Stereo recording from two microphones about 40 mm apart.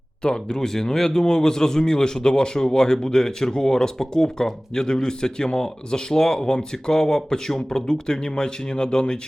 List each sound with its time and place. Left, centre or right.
0.2 s speech: centre